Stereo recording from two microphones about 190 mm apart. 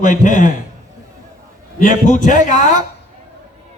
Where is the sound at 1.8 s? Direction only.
40° left (ahead or behind).